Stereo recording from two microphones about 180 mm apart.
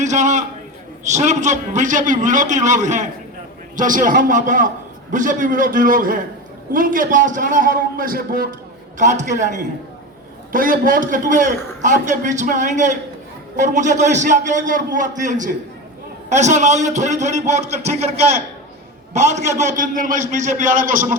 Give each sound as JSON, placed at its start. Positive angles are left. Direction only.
{"t": 0.0, "sound": "a man's voice", "side_deg": -40}
{"t": 19.1, "sound": "a man's voice", "side_deg": -40}